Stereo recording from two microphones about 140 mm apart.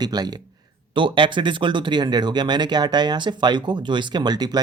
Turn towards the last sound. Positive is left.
turn(degrees=-30)  # may be behind; listen again after turning